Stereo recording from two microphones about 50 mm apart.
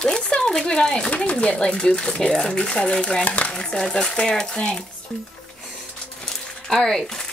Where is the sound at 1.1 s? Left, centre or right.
Left.